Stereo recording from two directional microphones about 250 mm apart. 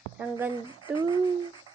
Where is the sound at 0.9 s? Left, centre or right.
Centre.